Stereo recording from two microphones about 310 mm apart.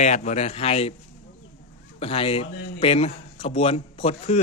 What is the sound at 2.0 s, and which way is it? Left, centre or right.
A man's voice, centre.